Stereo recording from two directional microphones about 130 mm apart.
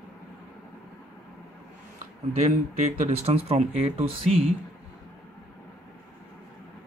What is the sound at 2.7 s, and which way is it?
Speech, 60° right (ahead or behind).